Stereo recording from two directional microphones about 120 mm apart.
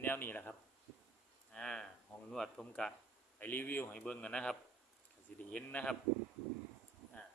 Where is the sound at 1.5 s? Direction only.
5° left (ahead or behind).